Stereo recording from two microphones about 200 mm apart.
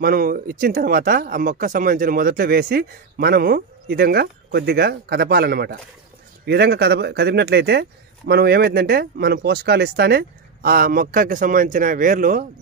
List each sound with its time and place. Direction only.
0.0 s speech: 45° right (ahead or behind)